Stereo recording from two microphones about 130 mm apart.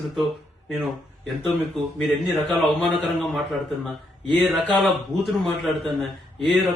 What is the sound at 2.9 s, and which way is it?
A man's voice, centre (ahead or behind).